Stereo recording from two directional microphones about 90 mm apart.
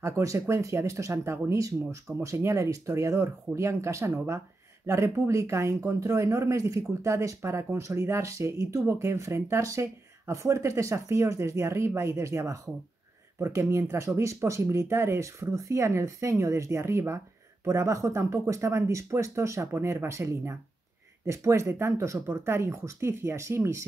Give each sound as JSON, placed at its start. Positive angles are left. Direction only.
{"t": 0.0, "sound": "speech", "side_deg": -35}